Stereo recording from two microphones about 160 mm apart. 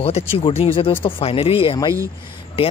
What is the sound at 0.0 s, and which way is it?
Speech, 35° left (ahead or behind).